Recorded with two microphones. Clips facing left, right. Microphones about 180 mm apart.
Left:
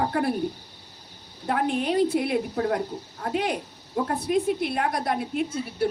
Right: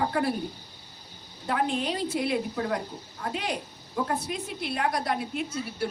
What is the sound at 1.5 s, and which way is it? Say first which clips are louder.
A woman's voice: left 3 dB; 55° left (ahead or behind).